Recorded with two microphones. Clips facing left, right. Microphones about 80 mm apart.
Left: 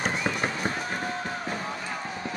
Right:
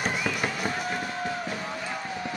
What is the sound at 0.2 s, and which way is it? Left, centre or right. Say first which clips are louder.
Run: left 1 dB; left.